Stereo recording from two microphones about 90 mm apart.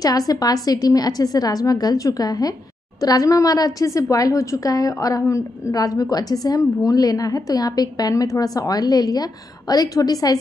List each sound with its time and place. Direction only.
0.0 s a woman's voice: 45° left (ahead or behind)